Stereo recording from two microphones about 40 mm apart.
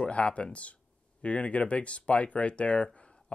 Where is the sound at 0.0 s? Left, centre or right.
Left.